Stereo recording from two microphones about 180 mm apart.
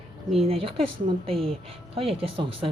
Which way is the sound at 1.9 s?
35° right (ahead or behind).